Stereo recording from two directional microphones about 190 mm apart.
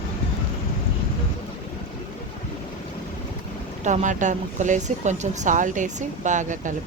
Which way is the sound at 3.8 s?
40° right (ahead or behind).